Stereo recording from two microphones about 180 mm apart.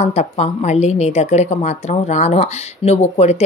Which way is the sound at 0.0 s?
40° left (ahead or behind).